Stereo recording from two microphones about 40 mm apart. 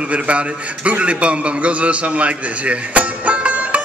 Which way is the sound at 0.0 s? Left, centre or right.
Right.